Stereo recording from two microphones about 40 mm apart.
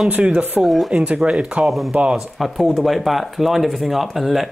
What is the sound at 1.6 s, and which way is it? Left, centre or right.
Speech, centre.